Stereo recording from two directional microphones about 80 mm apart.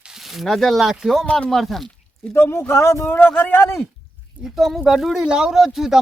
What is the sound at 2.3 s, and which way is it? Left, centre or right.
Speech, left.